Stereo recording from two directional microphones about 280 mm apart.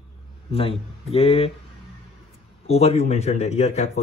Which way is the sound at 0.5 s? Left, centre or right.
Centre.